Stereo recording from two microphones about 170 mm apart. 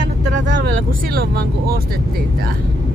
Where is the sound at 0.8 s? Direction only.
60° right (ahead or behind).